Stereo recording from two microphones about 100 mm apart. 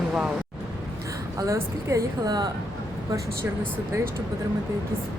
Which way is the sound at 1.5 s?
30° right (ahead or behind).